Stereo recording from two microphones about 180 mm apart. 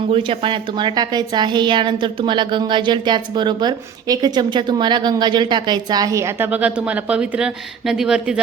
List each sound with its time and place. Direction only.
0.1 s a woman's voice: 30° right (ahead or behind); by 8.4 s 5° right (ahead or behind)